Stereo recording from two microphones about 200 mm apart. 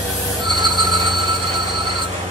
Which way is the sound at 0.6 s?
20° right (ahead or behind).